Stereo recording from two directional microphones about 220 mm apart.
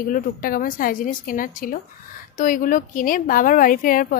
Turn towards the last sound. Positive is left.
turn(degrees=40)  # may be behind; listen again after turning